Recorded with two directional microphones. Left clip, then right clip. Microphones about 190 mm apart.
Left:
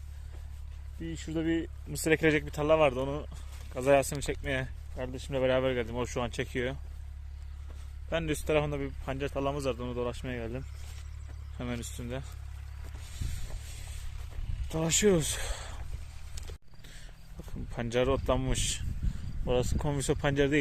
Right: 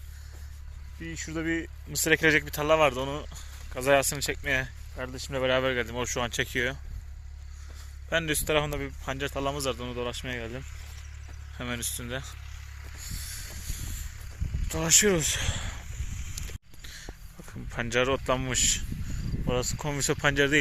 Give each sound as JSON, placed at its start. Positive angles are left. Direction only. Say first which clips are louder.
{"t": 1.0, "sound": "speech", "louder": "right 1 dB", "side_deg": 20}
{"t": 8.1, "sound": "speech", "louder": "right 3 dB", "side_deg": 0}
{"t": 14.7, "sound": "speech", "louder": "right 3 dB", "side_deg": 10}
{"t": 16.4, "sound": "a sound", "louder": "right 6 dB", "side_deg": 25}
{"t": 17.7, "sound": "speech", "louder": "right 3 dB", "side_deg": 10}
{"t": 19.5, "sound": "speech", "louder": "even", "side_deg": 25}
{"t": 20.0, "sound": "speech", "louder": "right 4 dB", "side_deg": 10}